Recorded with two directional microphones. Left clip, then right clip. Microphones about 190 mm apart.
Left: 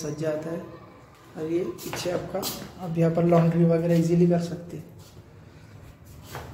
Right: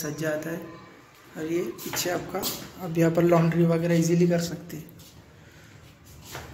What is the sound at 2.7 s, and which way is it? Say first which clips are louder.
Speech: right 3 dB; 15° right (ahead or behind).